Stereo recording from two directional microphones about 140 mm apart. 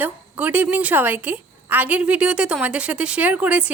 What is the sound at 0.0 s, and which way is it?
A woman's voice, 10° right (ahead or behind).